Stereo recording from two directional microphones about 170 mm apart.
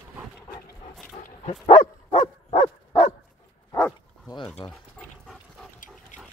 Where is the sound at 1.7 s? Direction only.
35° left (ahead or behind).